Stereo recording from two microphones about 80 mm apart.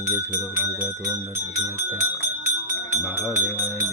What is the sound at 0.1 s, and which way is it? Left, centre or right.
Speech, right.